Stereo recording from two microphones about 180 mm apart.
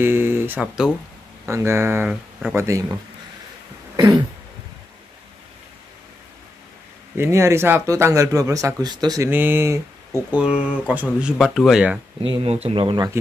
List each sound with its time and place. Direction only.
0.0 s speech: 10° right (ahead or behind)
1.4 s speech: 15° right (ahead or behind)
7.2 s speech: 15° right (ahead or behind)
9.3 s speech: 10° right (ahead or behind)
12.2 s speech: 35° right (ahead or behind)